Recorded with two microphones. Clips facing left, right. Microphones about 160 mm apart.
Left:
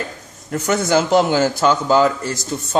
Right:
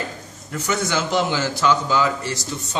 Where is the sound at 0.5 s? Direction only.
50° left (ahead or behind).